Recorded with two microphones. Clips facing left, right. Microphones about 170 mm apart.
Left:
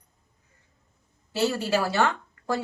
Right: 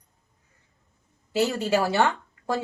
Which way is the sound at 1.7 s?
20° right (ahead or behind).